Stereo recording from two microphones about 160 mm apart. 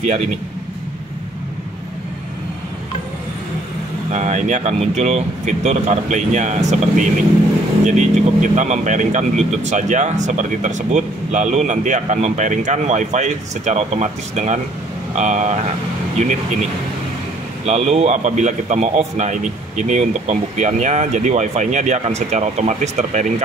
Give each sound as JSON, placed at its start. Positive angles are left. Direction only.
{"t": 4.1, "sound": "a man's voice", "side_deg": -50}
{"t": 17.6, "sound": "a man's voice", "side_deg": -40}